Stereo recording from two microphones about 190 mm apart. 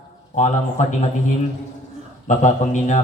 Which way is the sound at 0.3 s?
40° left (ahead or behind).